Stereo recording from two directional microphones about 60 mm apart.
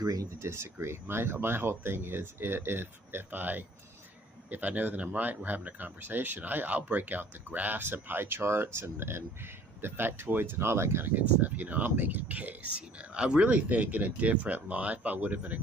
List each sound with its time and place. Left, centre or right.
0.0 s speech: right
0.4 s speech: right
11.1 s speech: right